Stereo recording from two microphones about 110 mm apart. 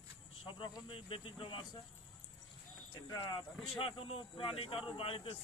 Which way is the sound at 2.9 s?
40° left (ahead or behind).